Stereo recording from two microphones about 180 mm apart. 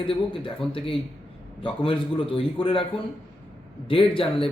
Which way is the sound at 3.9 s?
30° left (ahead or behind).